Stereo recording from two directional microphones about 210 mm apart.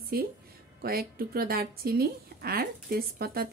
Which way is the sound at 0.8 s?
45° right (ahead or behind).